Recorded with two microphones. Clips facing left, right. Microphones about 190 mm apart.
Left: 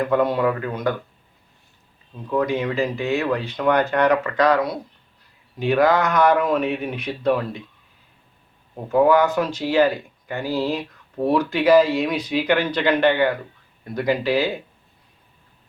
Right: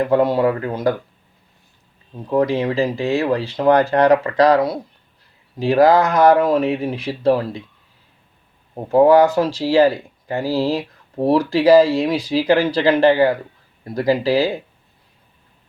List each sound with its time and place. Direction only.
0.0 s speech: 30° right (ahead or behind)
2.1 s speech: 35° right (ahead or behind)
8.7 s speech: 35° right (ahead or behind)